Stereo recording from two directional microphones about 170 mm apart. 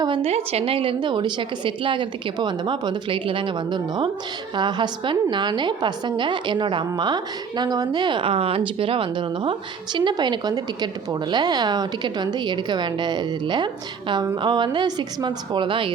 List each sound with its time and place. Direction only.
0.0 s a woman's voice: 30° right (ahead or behind)